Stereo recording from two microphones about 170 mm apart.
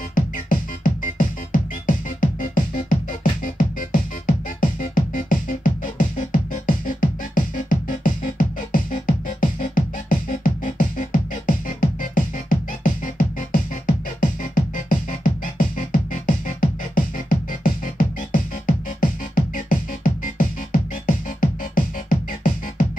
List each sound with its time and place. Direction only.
0.1 s music: 55° left (ahead or behind)